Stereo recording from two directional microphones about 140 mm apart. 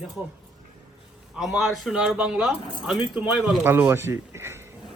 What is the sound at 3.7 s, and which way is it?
Speech, 15° right (ahead or behind).